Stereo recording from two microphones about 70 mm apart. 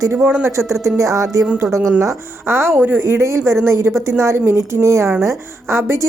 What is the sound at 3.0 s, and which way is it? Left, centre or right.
A woman's voice, right.